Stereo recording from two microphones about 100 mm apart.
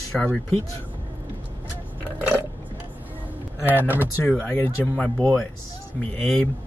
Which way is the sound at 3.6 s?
20° right (ahead or behind).